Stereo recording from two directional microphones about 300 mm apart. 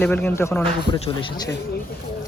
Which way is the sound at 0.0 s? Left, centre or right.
Centre.